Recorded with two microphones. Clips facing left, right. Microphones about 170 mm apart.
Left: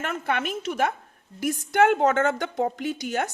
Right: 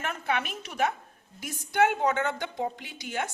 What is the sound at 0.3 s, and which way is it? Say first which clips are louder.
Speech: left 4 dB; 55° left (ahead or behind).